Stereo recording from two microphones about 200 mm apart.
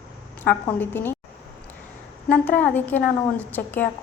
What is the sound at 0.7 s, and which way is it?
Speech, 10° left (ahead or behind).